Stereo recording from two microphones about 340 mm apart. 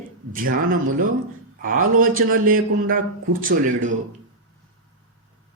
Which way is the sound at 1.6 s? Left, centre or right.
Right.